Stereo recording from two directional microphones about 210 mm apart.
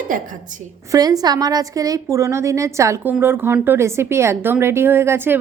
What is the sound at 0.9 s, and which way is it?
A woman's voice, 20° right (ahead or behind).